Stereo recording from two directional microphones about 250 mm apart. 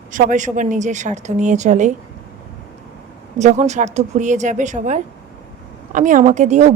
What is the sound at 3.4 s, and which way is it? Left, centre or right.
Speech, right.